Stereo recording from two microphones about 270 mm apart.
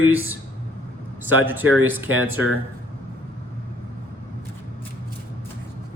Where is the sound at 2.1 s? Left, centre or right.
Right.